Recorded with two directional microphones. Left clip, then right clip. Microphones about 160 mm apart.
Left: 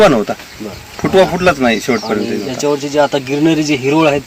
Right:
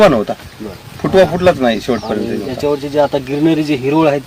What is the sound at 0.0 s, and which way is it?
Speech, 5° right (ahead or behind).